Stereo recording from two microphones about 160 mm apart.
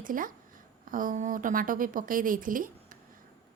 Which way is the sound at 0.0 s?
60° right (ahead or behind).